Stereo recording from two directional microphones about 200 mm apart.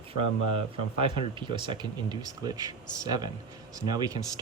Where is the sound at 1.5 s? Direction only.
25° right (ahead or behind).